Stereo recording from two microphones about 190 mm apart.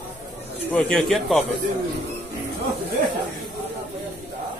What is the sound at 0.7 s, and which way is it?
Speech, 5° left (ahead or behind).